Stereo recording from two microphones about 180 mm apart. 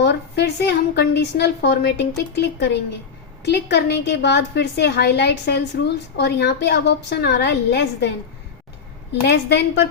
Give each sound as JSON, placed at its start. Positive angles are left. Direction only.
{"t": 0.0, "sound": "a woman's voice", "side_deg": 65}
{"t": 9.2, "sound": "a woman's voice", "side_deg": 65}